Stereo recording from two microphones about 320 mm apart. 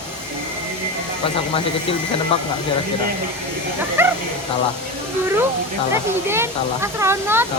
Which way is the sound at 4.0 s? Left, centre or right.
Centre.